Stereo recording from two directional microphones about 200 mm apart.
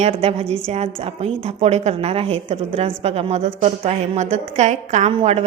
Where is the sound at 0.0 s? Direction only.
30° right (ahead or behind).